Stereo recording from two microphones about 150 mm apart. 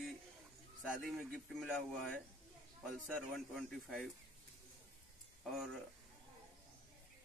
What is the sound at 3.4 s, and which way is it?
Speech, centre (ahead or behind).